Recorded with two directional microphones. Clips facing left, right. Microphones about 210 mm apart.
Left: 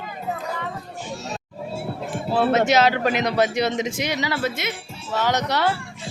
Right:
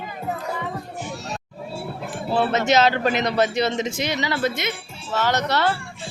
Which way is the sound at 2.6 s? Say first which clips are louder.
Even; 10° left (ahead or behind).